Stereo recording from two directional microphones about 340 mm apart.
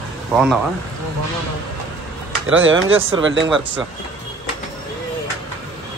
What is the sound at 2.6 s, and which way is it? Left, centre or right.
Speech, right.